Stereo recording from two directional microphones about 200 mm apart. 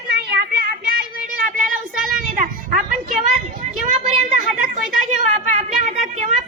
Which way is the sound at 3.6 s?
35° right (ahead or behind).